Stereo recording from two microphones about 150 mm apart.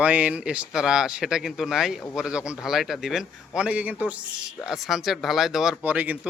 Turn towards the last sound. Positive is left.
turn(degrees=-10)  # may be behind; listen again after turning